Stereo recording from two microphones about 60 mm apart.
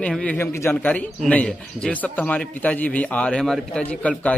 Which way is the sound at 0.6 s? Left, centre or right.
Left.